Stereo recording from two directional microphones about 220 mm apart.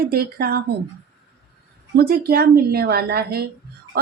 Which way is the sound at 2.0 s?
45° right (ahead or behind).